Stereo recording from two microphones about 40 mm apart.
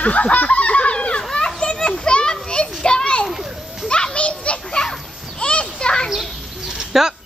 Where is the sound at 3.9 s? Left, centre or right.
Left.